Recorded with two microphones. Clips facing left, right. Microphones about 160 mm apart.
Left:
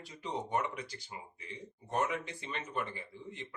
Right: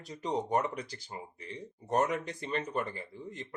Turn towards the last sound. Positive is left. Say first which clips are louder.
# right 3 dB
turn(degrees=-40)  # may be behind; listen again after turning